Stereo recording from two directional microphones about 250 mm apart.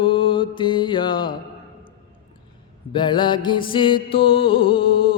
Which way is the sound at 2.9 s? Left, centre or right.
Centre.